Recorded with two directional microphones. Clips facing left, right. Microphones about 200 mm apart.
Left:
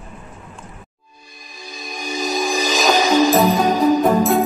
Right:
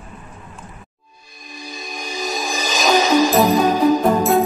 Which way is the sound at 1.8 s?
Centre (ahead or behind).